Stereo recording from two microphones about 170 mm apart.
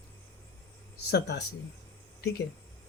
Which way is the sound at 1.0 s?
80° left.